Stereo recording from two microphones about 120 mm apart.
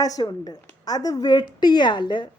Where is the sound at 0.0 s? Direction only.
30° left (ahead or behind).